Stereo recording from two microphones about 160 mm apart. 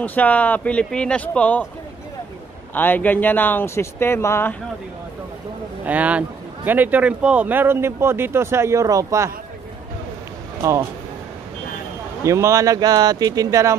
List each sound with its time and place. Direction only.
0.0 s speech: 10° left (ahead or behind)
2.7 s speech: 10° left (ahead or behind)
5.9 s a man's voice: 10° right (ahead or behind)
10.6 s speech: 20° right (ahead or behind)
12.3 s speech: 20° right (ahead or behind)